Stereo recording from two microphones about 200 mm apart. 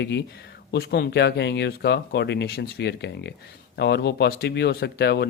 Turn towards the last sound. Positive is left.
turn(degrees=55)  # may be behind; listen again after turning